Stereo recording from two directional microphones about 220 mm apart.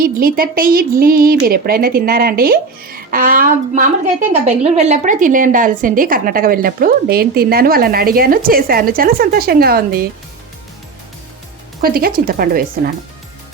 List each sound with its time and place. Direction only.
0.0 s speech: 40° right (ahead or behind)
11.8 s speech: 40° right (ahead or behind)